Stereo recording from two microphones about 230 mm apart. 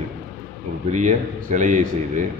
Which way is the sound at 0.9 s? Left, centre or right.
Right.